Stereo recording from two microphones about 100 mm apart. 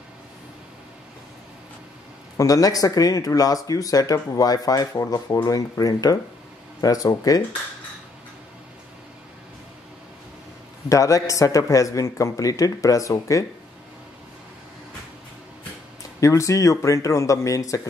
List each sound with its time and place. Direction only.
2.3 s speech: 35° left (ahead or behind)
10.9 s speech: 35° left (ahead or behind)
16.2 s speech: 30° left (ahead or behind)